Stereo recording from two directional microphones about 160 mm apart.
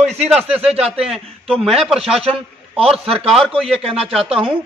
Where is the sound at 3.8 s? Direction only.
35° right (ahead or behind).